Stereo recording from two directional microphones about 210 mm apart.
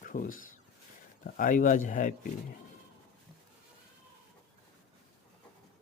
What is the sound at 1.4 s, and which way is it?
Speech, 40° left (ahead or behind).